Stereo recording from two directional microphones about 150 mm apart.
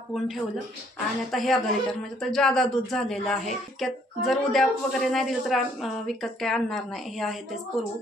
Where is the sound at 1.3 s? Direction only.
Centre (ahead or behind).